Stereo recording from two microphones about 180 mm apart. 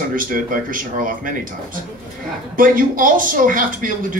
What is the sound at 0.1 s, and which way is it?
Speech, 50° right (ahead or behind).